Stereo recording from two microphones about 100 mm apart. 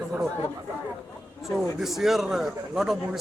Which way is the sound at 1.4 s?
Centre (ahead or behind).